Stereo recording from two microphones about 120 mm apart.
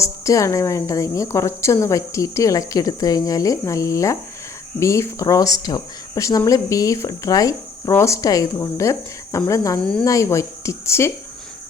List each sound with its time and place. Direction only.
0.0 s speech: 25° left (ahead or behind)